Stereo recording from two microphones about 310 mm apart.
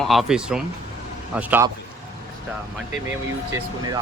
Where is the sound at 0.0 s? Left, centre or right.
Centre.